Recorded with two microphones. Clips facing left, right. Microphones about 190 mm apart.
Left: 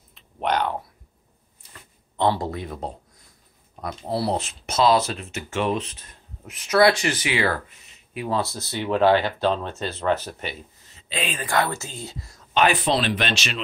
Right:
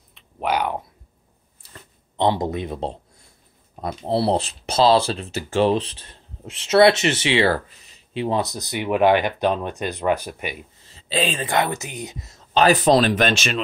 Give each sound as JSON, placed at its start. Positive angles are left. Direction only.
{"t": 0.1, "sound": "typing", "side_deg": -5}
{"t": 2.1, "sound": "speech", "side_deg": -20}
{"t": 11.0, "sound": "speech", "side_deg": -30}
{"t": 12.5, "sound": "speech", "side_deg": -40}